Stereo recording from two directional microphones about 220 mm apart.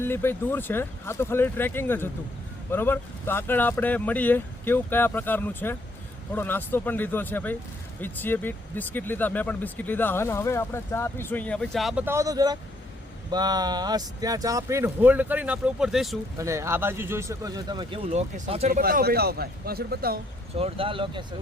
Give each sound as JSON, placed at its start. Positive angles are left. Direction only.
{"t": 0.0, "sound": "speech", "side_deg": 10}
{"t": 16.4, "sound": "speech", "side_deg": -15}
{"t": 18.8, "sound": "speech", "side_deg": -40}
{"t": 20.6, "sound": "speech", "side_deg": -25}